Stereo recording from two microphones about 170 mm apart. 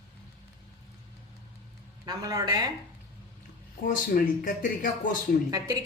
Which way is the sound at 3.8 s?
50° left (ahead or behind).